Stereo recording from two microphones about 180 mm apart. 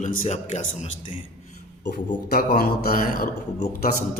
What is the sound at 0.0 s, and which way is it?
Speech, 40° left (ahead or behind).